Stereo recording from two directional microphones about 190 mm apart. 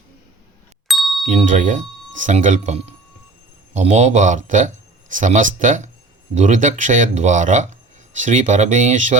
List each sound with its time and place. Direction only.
0.9 s ding: centre (ahead or behind)
1.3 s speech: 40° right (ahead or behind)